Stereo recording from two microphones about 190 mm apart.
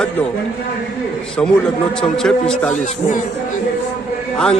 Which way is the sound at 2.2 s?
5° left (ahead or behind).